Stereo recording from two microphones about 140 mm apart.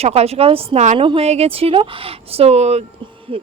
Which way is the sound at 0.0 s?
50° right (ahead or behind).